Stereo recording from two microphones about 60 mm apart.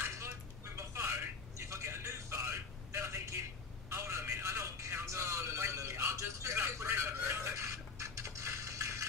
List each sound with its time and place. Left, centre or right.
0.7 s telephone: right
3.9 s music: right
6.1 s a sound: right